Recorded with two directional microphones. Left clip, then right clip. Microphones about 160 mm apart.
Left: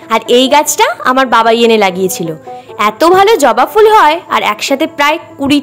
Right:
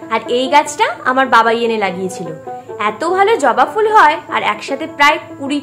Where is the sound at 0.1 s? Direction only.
65° left (ahead or behind).